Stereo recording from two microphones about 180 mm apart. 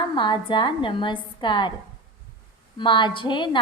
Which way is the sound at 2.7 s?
25° left (ahead or behind).